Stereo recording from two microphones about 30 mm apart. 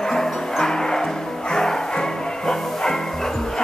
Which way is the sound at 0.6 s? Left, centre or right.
Centre.